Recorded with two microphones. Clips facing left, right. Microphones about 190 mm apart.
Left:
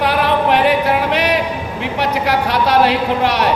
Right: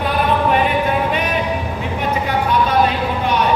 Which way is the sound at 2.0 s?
80° left.